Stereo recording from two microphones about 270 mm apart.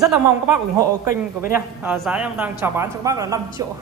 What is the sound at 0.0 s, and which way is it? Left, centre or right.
A man's voice, centre.